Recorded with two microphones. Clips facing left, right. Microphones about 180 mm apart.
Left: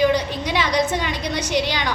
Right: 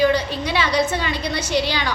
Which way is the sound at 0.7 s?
5° right (ahead or behind).